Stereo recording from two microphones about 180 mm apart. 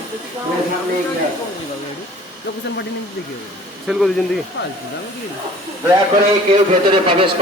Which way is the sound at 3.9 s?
Centre (ahead or behind).